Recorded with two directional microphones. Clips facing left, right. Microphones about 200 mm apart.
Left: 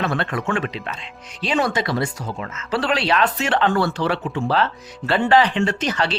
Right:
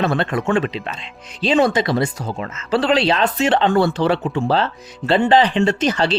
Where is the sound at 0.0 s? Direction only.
25° right (ahead or behind).